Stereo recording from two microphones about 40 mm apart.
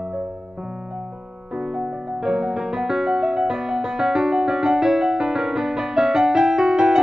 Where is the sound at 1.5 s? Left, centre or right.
Centre.